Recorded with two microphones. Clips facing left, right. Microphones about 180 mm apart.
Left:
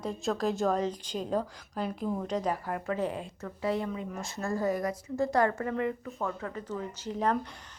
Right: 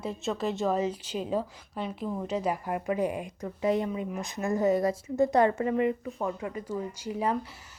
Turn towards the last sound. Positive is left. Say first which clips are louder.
# even
turn(degrees=-5)  # may be behind; listen again after turning